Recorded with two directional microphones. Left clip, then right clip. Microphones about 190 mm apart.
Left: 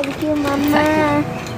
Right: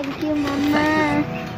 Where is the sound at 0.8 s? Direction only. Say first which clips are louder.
Left 3 dB; 20° left (ahead or behind).